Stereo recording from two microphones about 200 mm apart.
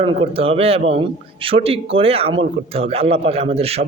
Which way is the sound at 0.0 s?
30° right (ahead or behind).